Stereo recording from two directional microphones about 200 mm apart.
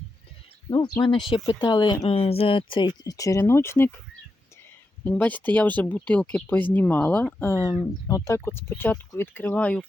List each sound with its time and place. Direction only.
1.0 s speech: 25° left (ahead or behind)
5.0 s speech: 10° left (ahead or behind)